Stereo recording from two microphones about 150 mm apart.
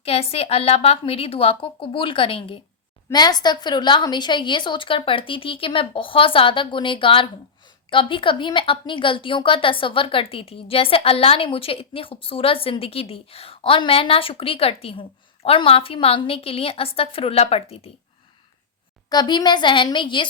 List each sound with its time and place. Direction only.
0.0 s a woman's voice: 40° left (ahead or behind)
19.1 s a woman's voice: 30° left (ahead or behind)